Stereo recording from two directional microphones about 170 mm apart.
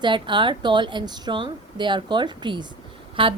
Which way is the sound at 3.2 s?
30° right (ahead or behind).